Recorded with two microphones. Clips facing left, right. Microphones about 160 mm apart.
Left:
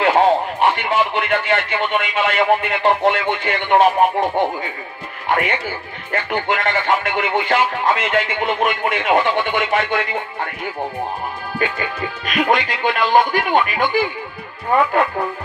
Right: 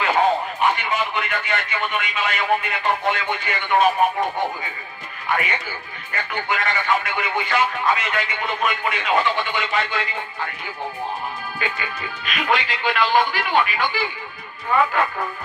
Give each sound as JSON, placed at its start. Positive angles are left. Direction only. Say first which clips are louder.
{"t": 0.6, "sound": "speech", "louder": "left 4 dB", "side_deg": 60}
{"t": 5.2, "sound": "speech", "louder": "left 5 dB", "side_deg": 55}
{"t": 6.3, "sound": "music", "louder": "left 4 dB", "side_deg": 55}
{"t": 11.5, "sound": "speech", "louder": "left 6 dB", "side_deg": 45}